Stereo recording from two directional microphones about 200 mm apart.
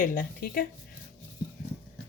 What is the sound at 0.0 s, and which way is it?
Speech, 45° left (ahead or behind).